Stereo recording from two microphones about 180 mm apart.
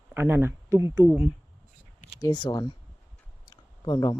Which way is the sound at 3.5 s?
25° left (ahead or behind).